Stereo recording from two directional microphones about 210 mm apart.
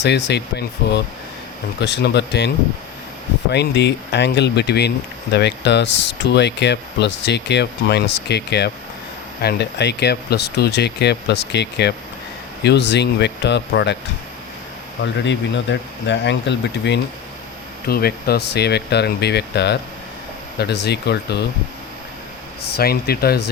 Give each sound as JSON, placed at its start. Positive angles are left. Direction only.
{"t": 0.0, "sound": "speech", "side_deg": 55}
{"t": 3.5, "sound": "speech", "side_deg": 55}
{"t": 15.0, "sound": "speech", "side_deg": 60}
{"t": 22.7, "sound": "speech", "side_deg": 45}